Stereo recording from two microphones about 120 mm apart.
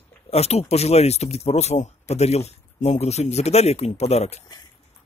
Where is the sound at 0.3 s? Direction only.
60° left (ahead or behind).